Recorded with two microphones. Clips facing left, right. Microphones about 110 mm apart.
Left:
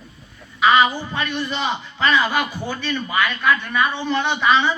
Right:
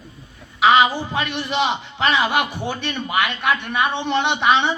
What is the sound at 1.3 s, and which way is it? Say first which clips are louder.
A man's voice: right 3 dB; 75° right (ahead or behind).